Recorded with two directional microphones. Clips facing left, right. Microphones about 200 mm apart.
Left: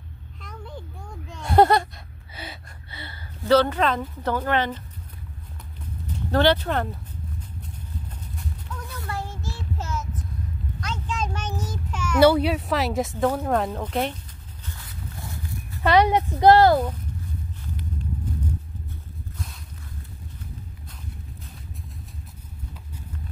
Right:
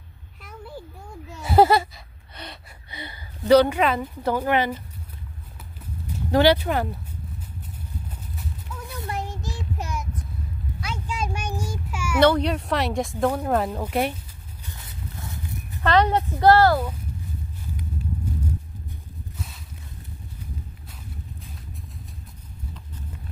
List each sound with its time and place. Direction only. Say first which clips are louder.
0.4 s a sound: right 1 dB; 5° right (ahead or behind)
2.9 s a woman's voice: right 3 dB; 15° right (ahead or behind)
6.1 s speech: right 2 dB; 10° right (ahead or behind)
8.4 s child singing: left 1 dB; 5° right (ahead or behind)
10.8 s a sound: even; 10° right (ahead or behind)
12.2 s speech: left 2 dB; 5° left (ahead or behind); by 14.1 s 10° right (ahead or behind)
14.6 s dog: even; 20° right (ahead or behind)
15.8 s a woman's voice: left 1 dB; 10° left (ahead or behind)
19.3 s a sound: even; 5° right (ahead or behind)